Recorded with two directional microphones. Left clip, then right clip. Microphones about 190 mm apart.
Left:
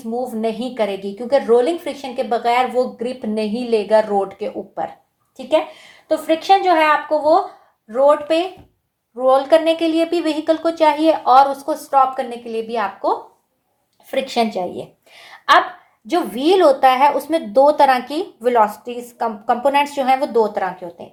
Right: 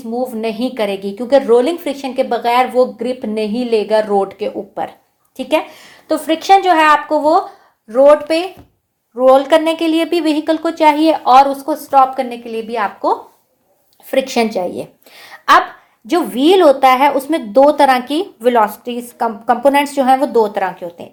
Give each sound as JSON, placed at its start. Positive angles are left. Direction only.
{"t": 0.0, "sound": "speech", "side_deg": -25}
{"t": 5.4, "sound": "a woman's voice", "side_deg": -45}
{"t": 14.1, "sound": "a woman's voice", "side_deg": -45}
{"t": 16.0, "sound": "speech", "side_deg": -30}